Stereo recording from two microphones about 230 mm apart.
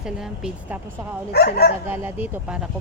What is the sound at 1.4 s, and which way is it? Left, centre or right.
Speech, left.